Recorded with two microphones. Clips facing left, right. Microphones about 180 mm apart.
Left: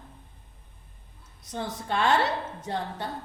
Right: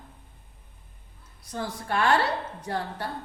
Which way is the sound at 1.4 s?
20° left (ahead or behind).